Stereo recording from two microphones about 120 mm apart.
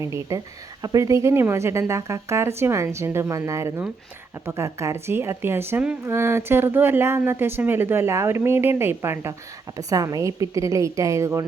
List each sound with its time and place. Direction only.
0.0 s speech: 25° right (ahead or behind)